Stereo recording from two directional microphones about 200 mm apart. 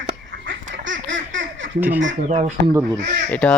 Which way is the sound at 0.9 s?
70° right (ahead or behind).